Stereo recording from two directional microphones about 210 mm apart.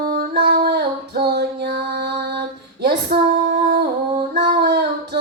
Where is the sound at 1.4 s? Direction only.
50° right (ahead or behind).